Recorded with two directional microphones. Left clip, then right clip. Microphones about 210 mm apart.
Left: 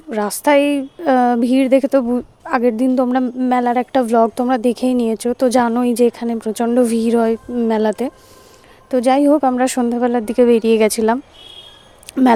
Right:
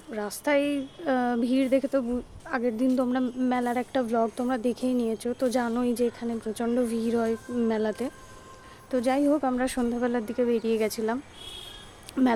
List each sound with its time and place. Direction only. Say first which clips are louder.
0.1 s a woman's voice: left 12 dB; 40° left (ahead or behind)
12.2 s speech: left 11 dB; 30° left (ahead or behind)